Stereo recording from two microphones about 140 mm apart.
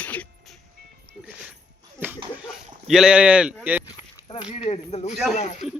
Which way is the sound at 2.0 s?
15° right (ahead or behind).